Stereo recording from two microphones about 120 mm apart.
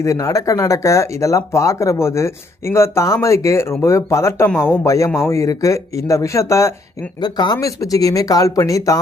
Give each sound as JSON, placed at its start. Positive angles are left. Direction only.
{"t": 0.0, "sound": "speech", "side_deg": 25}
{"t": 7.2, "sound": "speech", "side_deg": 35}